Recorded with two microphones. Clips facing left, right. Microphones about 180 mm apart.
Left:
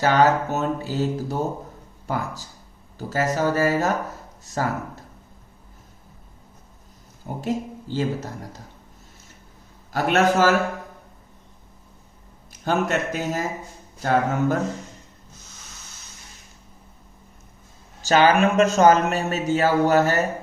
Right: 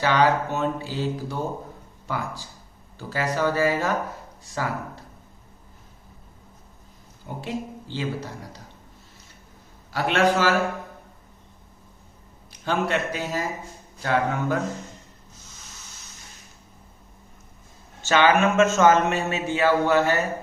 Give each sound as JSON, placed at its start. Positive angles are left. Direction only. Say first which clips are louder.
{"t": 0.0, "sound": "speech", "louder": "left 2 dB", "side_deg": 45}
{"t": 7.4, "sound": "speech", "louder": "left 5 dB", "side_deg": 45}
{"t": 9.9, "sound": "speech", "louder": "left 2 dB", "side_deg": 45}
{"t": 12.5, "sound": "a man's voice", "louder": "left 2 dB", "side_deg": 45}
{"t": 18.0, "sound": "speech", "louder": "left 2 dB", "side_deg": 40}